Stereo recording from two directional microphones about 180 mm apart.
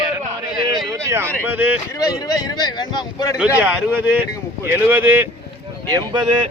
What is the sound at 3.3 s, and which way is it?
Speech, 5° right (ahead or behind).